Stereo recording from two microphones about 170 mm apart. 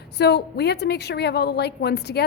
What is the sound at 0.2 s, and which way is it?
A woman's voice, 75° left (ahead or behind).